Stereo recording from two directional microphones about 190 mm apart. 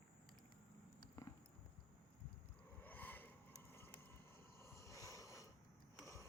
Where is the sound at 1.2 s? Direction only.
20° left (ahead or behind).